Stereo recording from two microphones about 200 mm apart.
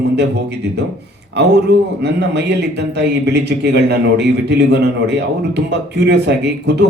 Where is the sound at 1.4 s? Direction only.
55° right (ahead or behind).